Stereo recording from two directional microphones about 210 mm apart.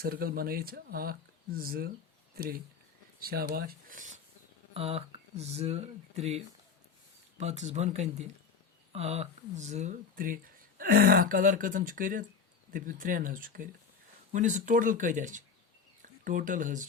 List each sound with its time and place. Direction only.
0.0 s speech: 45° right (ahead or behind)